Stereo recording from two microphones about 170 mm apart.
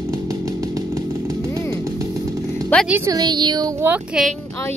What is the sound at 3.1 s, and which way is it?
Speech, 25° right (ahead or behind).